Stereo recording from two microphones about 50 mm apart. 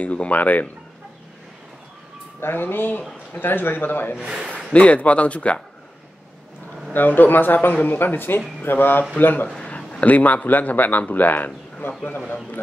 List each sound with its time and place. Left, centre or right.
0.0 s speech: left
2.4 s a man's voice: left
4.2 s a man's voice: centre
4.7 s speech: left
6.9 s a man's voice: left
9.7 s a sound: left
10.0 s speech: left
11.8 s a man's voice: left